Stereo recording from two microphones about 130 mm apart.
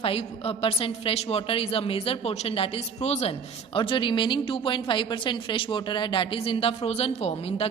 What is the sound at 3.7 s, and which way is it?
A woman's voice, 40° left (ahead or behind).